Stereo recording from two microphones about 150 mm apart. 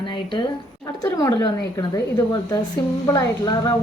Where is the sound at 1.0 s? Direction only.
20° left (ahead or behind).